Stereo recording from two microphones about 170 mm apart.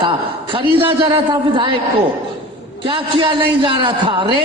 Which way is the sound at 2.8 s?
30° right (ahead or behind).